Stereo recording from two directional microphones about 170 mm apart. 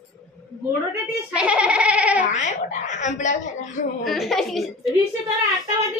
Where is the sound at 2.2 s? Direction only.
45° left (ahead or behind).